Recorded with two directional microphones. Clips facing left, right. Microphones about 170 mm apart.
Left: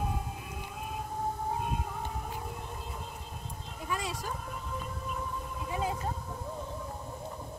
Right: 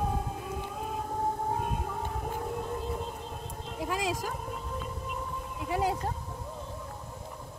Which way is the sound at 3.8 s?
90° right.